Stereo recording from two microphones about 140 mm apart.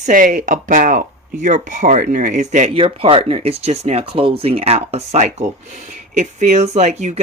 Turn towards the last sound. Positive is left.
turn(degrees=-55)  # may be behind; listen again after turning